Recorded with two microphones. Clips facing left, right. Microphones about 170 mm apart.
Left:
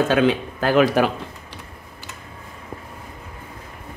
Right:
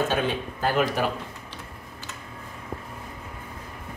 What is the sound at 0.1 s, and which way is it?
Speech, 90° left.